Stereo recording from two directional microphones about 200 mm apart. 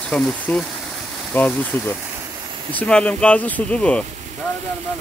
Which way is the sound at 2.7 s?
5° left (ahead or behind).